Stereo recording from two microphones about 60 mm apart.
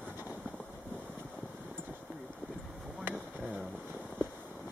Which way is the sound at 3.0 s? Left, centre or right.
Right.